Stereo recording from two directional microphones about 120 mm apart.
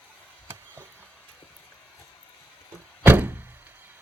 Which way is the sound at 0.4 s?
20° right (ahead or behind).